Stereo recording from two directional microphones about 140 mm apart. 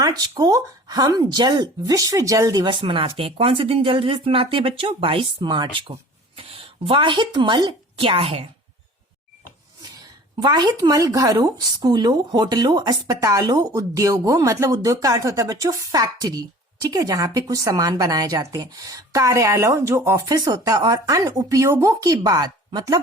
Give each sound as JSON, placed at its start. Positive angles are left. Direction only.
{"t": 0.0, "sound": "speech", "side_deg": -30}
{"t": 2.6, "sound": "speech", "side_deg": -35}
{"t": 10.3, "sound": "speech", "side_deg": -30}